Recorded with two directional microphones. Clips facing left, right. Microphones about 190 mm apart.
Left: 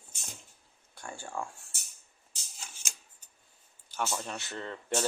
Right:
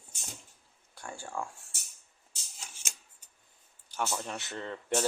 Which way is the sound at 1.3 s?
5° left (ahead or behind).